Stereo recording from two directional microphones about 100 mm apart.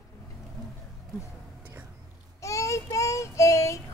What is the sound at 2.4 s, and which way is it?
Child singing, 30° left (ahead or behind).